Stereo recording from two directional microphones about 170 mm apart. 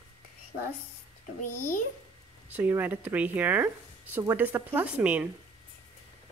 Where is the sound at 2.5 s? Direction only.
10° right (ahead or behind).